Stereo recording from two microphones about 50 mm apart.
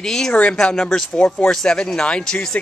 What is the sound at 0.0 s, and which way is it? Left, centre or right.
A man's voice, centre.